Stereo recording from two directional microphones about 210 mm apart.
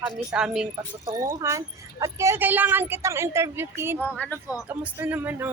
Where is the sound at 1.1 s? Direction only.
15° right (ahead or behind).